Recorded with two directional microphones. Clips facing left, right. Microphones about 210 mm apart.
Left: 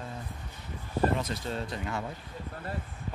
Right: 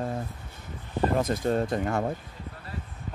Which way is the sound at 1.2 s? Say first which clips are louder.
Right 9 dB; 50° right (ahead or behind).